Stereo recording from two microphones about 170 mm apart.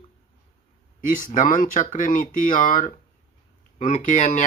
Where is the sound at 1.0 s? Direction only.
50° left (ahead or behind).